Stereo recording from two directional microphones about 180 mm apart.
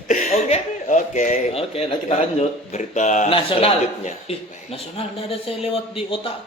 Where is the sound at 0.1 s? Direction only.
45° left (ahead or behind).